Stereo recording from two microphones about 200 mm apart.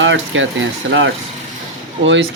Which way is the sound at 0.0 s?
70° right (ahead or behind).